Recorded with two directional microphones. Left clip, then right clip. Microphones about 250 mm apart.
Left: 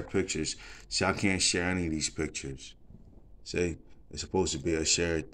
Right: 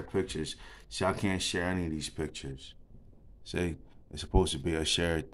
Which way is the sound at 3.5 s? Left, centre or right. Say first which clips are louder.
Left 3 dB; right.